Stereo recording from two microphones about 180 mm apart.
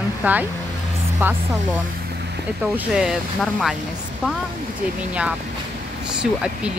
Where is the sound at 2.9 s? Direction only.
5° right (ahead or behind).